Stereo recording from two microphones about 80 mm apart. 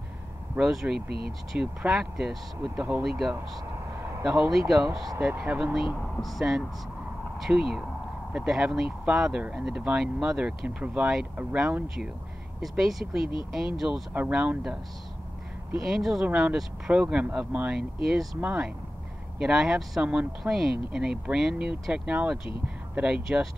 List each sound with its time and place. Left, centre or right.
0.6 s speech: centre
2.7 s speech: right
3.0 s speech: centre
3.9 s a sound: right
4.2 s speech: centre
5.3 s speech: centre
5.6 s speech: centre
14.3 s speech: centre
15.8 s speech: centre
16.3 s speech: centre
18.0 s speech: centre
18.4 s speech: centre